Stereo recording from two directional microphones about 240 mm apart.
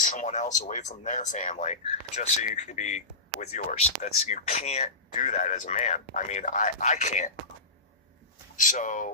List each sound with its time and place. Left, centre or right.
0.0 s speech: left
8.5 s speech: left